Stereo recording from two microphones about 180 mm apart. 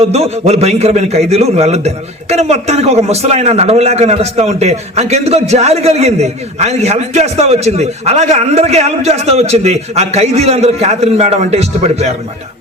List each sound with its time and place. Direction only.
0.0 s a man's voice: 35° right (ahead or behind)